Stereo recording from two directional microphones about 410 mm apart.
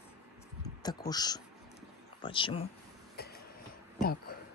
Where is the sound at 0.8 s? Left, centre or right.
Centre.